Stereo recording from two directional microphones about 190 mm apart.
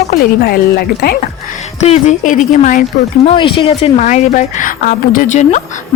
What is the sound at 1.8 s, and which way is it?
A woman's voice, 35° left (ahead or behind).